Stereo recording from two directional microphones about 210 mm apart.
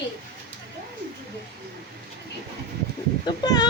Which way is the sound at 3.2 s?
20° left (ahead or behind).